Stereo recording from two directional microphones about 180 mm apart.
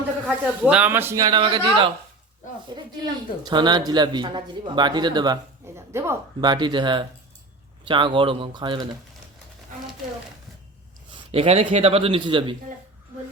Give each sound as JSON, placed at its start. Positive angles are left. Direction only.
{"t": 0.3, "sound": "speech", "side_deg": -5}
{"t": 3.4, "sound": "speech", "side_deg": -25}
{"t": 11.3, "sound": "speech", "side_deg": -35}